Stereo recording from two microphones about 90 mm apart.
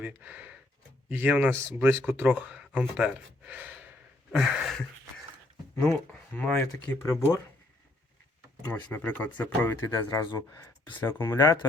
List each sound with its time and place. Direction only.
0.0 s speech: 20° right (ahead or behind)
1.5 s speech: 30° right (ahead or behind)
4.3 s a sound: 10° right (ahead or behind)
6.6 s speech: 20° left (ahead or behind)
8.6 s speech: 20° left (ahead or behind)
9.8 s speech: 45° left (ahead or behind)
10.3 s speech: 35° left (ahead or behind)